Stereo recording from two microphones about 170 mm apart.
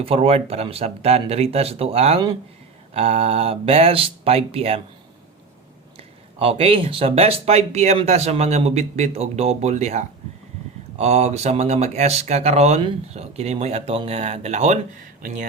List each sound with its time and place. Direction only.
0.0 s speech: 35° right (ahead or behind)
6.0 s speech: 35° right (ahead or behind)